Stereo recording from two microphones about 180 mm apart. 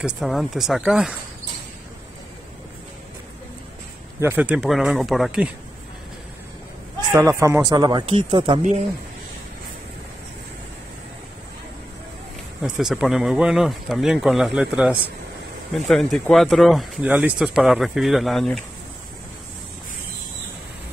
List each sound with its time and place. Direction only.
0.0 s speech: centre (ahead or behind)
4.2 s speech: 10° right (ahead or behind)
7.1 s speech: 15° right (ahead or behind)
12.6 s speech: centre (ahead or behind)